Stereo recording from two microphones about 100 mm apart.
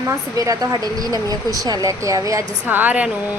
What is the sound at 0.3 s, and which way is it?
Speech, 35° right (ahead or behind).